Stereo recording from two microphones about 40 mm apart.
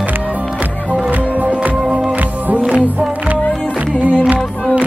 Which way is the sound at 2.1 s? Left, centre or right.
Right.